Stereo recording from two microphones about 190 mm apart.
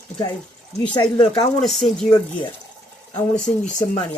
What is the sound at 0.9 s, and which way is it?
Speech, 25° left (ahead or behind).